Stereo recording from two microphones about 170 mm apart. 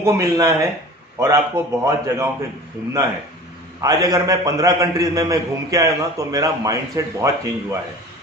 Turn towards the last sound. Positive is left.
turn(degrees=-20)  # may be behind; listen again after turning